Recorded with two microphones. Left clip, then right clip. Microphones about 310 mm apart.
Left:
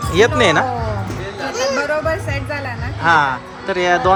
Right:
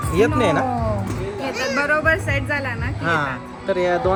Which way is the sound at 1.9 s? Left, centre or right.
Left.